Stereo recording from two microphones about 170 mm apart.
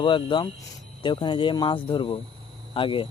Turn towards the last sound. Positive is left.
turn(degrees=30)  # may be behind; listen again after turning